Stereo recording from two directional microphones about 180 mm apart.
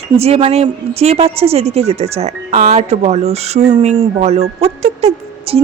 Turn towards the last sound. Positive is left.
turn(degrees=-30)  # may be behind; listen again after turning